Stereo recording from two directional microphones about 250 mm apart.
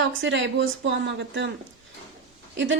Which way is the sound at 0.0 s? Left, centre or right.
Right.